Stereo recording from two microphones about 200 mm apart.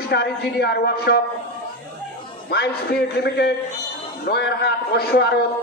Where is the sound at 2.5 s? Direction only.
55° left (ahead or behind).